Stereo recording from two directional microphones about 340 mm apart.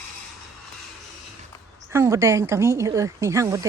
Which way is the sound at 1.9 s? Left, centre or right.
Centre.